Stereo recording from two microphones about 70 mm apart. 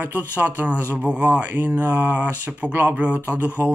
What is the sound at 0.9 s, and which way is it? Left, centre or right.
Speech, centre.